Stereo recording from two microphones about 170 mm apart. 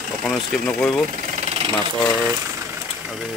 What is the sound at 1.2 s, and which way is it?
Engine, 40° right (ahead or behind).